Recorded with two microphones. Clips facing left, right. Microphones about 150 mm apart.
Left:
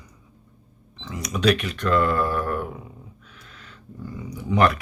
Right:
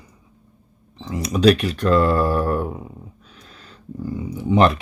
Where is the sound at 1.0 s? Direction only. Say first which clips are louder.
Right 6 dB; 30° right (ahead or behind).